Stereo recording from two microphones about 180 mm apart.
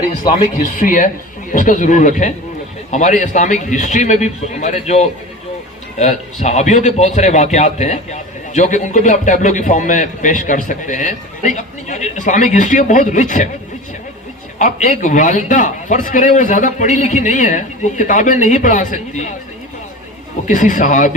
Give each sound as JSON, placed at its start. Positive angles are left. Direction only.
{"t": 0.2, "sound": "a man's voice", "side_deg": 45}
{"t": 14.6, "sound": "a man's voice", "side_deg": 45}
{"t": 20.5, "sound": "a man's voice", "side_deg": 45}